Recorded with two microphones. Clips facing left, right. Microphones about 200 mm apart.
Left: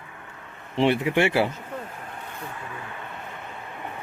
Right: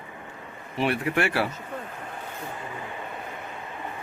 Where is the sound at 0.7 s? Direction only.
25° left (ahead or behind).